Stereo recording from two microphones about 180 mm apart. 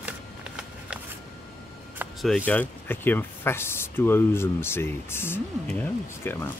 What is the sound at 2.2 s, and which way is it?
Speech, centre (ahead or behind).